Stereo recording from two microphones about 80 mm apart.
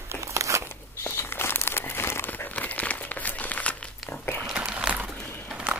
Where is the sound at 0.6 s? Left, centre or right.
Left; by 3.9 s centre.